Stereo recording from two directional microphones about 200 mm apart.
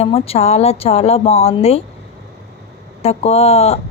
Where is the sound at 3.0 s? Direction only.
30° left (ahead or behind).